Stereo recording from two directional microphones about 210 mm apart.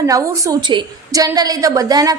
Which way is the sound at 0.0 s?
15° right (ahead or behind).